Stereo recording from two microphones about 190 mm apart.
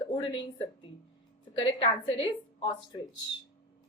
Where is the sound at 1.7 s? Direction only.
25° left (ahead or behind).